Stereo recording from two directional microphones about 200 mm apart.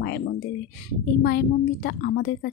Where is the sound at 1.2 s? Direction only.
50° left (ahead or behind).